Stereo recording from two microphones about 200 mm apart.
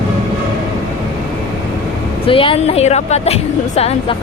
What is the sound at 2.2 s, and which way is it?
A woman's voice, 25° left (ahead or behind).